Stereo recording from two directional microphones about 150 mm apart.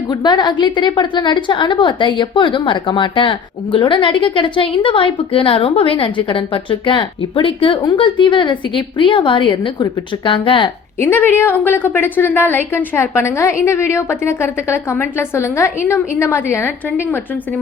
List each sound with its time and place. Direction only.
0.1 s a woman's voice: 30° left (ahead or behind)
11.0 s a woman's voice: 15° left (ahead or behind)